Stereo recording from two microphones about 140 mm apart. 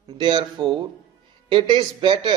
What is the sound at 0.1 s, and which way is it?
Speech, 30° right (ahead or behind).